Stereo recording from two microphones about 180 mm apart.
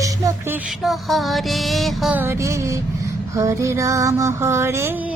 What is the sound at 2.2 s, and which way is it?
Music, 15° right (ahead or behind).